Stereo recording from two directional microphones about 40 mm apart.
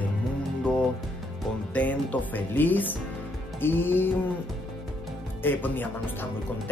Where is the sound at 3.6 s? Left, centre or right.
Left.